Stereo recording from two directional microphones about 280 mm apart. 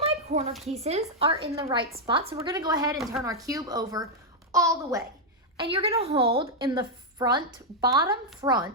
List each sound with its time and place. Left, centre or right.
0.0 s a sound: right
0.7 s a woman's voice: right
3.0 s speech: centre
3.2 s a woman's voice: centre